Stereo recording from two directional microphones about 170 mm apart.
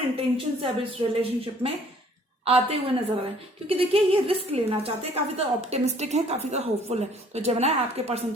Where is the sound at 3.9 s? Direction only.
35° right (ahead or behind).